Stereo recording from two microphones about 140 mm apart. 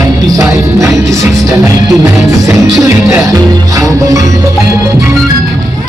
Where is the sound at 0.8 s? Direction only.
20° right (ahead or behind).